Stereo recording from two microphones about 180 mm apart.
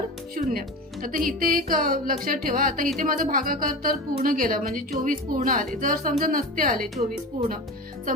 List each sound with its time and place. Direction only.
0.4 s a woman's voice: 45° right (ahead or behind)